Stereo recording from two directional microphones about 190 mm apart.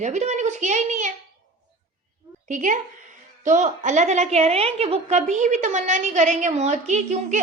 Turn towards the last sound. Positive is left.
turn(degrees=-40)  # may be behind; listen again after turning